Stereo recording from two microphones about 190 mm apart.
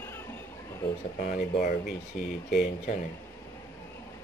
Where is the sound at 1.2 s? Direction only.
45° left (ahead or behind).